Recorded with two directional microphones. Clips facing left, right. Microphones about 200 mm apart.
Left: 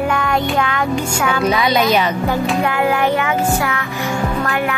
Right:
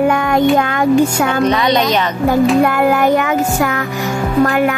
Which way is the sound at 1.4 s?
5° left (ahead or behind).